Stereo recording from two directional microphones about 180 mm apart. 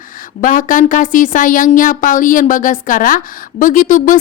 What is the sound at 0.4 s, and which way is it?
Speech, 50° left (ahead or behind).